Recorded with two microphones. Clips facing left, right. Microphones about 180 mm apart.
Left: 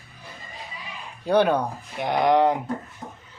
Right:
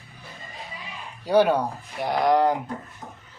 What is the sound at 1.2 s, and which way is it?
A man's voice, 5° right (ahead or behind).